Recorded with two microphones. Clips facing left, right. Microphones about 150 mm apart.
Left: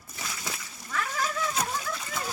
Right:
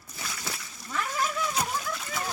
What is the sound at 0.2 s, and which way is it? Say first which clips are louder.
Splash: even; centre (ahead or behind).